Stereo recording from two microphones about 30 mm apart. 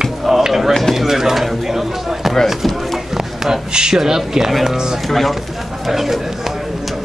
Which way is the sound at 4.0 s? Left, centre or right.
Centre.